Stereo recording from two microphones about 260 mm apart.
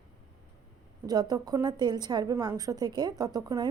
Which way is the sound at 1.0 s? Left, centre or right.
Centre.